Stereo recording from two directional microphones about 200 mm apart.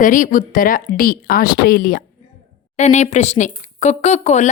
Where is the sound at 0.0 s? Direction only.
40° left (ahead or behind).